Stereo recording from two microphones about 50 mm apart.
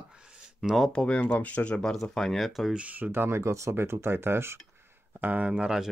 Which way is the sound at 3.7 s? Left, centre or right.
Right.